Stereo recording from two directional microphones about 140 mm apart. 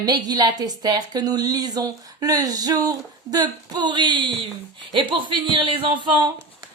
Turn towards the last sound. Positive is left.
turn(degrees=-35)  # may be behind; listen again after turning